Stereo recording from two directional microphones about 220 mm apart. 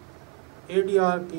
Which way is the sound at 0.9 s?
15° right (ahead or behind).